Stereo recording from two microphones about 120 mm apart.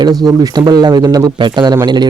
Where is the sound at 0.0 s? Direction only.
35° right (ahead or behind).